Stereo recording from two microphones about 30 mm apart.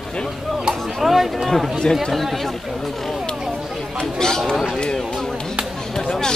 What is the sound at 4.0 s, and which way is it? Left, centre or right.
Speech, left.